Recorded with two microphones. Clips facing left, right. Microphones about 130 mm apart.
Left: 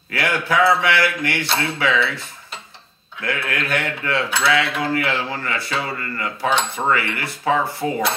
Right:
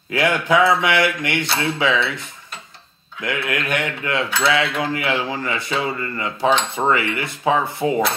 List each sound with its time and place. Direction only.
0.1 s speech: 20° right (ahead or behind)